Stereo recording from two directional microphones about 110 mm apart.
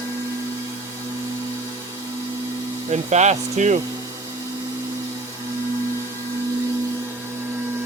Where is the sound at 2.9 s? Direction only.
90° right.